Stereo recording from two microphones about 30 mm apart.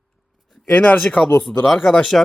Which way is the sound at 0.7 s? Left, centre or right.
Left.